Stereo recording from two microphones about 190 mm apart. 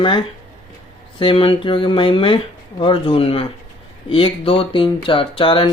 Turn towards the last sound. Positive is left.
turn(degrees=25)  # may be behind; listen again after turning